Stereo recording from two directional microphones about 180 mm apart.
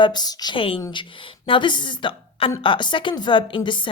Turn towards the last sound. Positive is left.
turn(degrees=25)  # may be behind; listen again after turning